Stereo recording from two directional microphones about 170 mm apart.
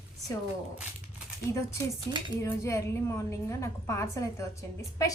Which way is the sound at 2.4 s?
15° left (ahead or behind).